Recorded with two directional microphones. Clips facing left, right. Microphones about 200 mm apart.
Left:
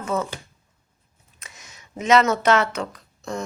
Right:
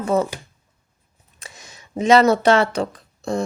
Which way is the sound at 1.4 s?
30° right (ahead or behind).